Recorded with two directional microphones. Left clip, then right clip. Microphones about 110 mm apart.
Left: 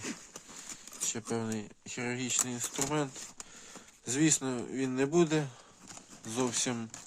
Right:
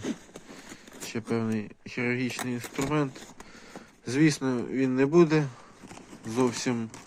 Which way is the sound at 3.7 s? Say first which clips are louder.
Right 5 dB; 45° left (ahead or behind).